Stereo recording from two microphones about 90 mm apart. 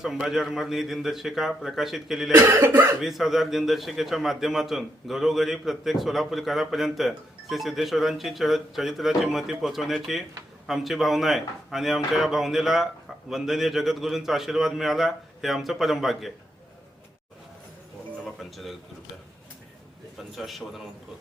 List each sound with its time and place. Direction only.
0.0 s a man's voice: 5° right (ahead or behind)
2.3 s cough: 20° right (ahead or behind)
3.0 s a man's voice: 5° right (ahead or behind)
18.3 s a sound: centre (ahead or behind)
20.3 s a man's voice: centre (ahead or behind)